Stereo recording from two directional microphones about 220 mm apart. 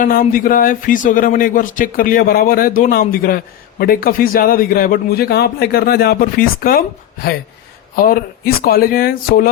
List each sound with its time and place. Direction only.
0.0 s a man's voice: 40° left (ahead or behind)